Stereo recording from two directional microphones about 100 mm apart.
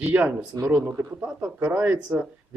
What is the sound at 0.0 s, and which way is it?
Speech, 20° right (ahead or behind).